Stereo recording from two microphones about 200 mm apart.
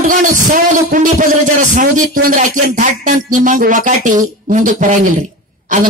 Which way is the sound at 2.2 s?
40° right (ahead or behind).